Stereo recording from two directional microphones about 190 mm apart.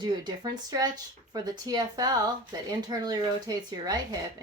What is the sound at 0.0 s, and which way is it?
A woman's voice, 25° right (ahead or behind).